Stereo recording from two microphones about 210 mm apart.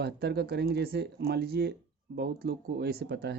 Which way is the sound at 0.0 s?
50° right (ahead or behind).